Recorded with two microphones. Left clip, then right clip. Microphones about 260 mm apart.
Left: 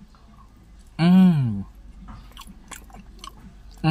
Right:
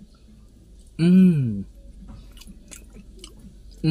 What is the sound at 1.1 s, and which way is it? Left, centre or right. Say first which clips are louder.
Speech: even; left.